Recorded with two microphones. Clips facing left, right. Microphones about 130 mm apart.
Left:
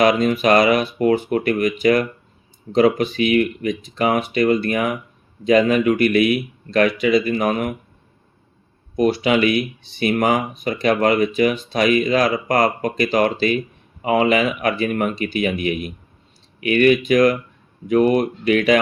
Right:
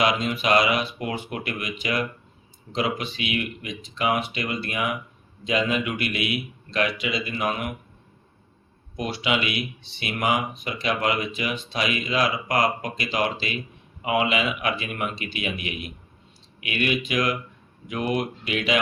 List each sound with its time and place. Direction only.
0.0 s speech: 45° left (ahead or behind)
9.0 s speech: 45° left (ahead or behind)